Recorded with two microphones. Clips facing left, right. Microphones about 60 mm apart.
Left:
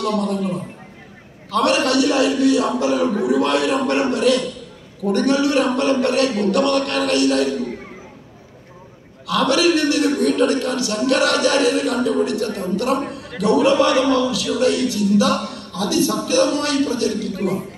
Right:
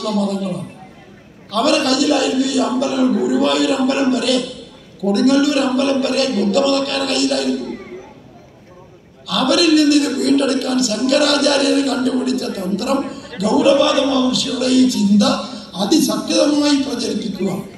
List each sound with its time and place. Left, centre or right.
0.0 s speech: left
1.5 s speech: left
9.3 s speech: left